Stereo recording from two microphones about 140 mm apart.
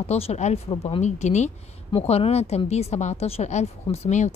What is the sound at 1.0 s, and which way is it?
Speech, 55° left (ahead or behind).